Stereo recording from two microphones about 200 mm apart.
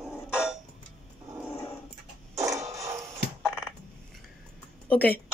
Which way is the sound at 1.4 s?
10° left (ahead or behind).